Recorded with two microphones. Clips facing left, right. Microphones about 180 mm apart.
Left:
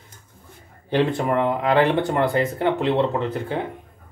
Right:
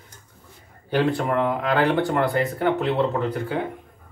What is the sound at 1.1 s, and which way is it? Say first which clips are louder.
Speech: left 1 dB; 20° left (ahead or behind).